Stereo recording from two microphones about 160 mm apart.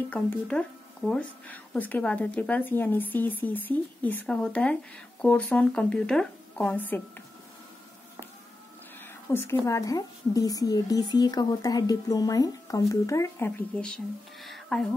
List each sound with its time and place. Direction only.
0.1 s speech: 10° left (ahead or behind)
9.3 s a woman's voice: 15° left (ahead or behind)